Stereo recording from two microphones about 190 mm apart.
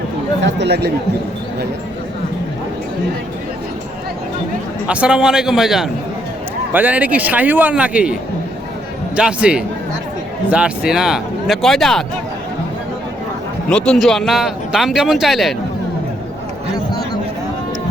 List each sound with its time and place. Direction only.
0.4 s speech: 60° right (ahead or behind)
4.9 s a man's voice: 5° right (ahead or behind)
13.7 s speech: 5° left (ahead or behind)